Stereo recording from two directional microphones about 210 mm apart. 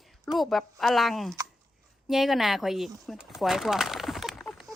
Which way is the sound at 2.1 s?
Centre (ahead or behind).